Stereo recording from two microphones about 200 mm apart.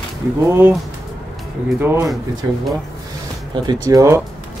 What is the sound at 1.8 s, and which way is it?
Speech, 10° right (ahead or behind).